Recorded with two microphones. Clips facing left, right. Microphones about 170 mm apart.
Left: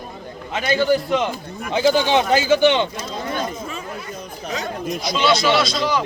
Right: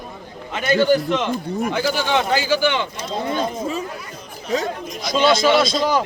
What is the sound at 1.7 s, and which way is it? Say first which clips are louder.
A man's voice: left 6 dB; 20° left (ahead or behind).